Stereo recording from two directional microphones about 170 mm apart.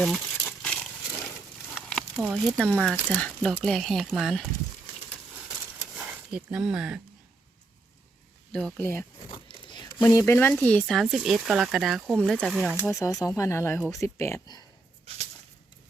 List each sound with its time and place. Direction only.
0.0 s crumpling: 5° left (ahead or behind)
1.7 s a sound: centre (ahead or behind)
2.3 s speech: centre (ahead or behind)
6.0 s speech: 5° right (ahead or behind)
8.8 s speech: 15° left (ahead or behind)
9.5 s a sound: 25° left (ahead or behind)
10.0 s speech: 20° left (ahead or behind); by 12.7 s centre (ahead or behind)
12.8 s speech: 15° left (ahead or behind)
15.1 s a sound: 35° right (ahead or behind)